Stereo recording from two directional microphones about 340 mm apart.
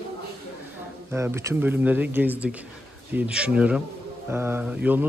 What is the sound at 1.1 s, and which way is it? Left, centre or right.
Speech, centre.